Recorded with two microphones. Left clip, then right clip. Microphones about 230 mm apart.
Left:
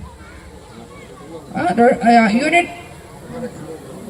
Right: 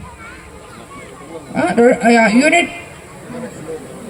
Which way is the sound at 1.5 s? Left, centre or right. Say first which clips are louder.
Right 2 dB; right.